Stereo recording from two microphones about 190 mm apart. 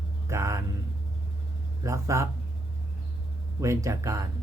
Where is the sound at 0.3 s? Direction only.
15° right (ahead or behind).